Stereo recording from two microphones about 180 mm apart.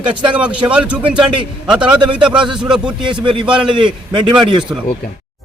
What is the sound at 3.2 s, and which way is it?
A man's voice, 25° right (ahead or behind).